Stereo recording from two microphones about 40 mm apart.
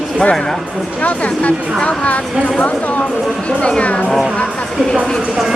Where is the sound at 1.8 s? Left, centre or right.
Left.